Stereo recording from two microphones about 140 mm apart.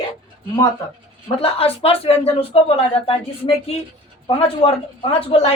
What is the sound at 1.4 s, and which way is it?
Speech, 45° left (ahead or behind).